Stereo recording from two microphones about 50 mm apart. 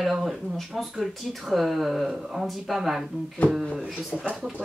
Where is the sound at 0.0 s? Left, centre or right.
Centre.